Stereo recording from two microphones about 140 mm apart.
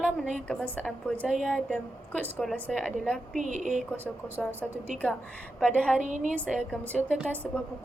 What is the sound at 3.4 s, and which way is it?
Speech, 60° right (ahead or behind).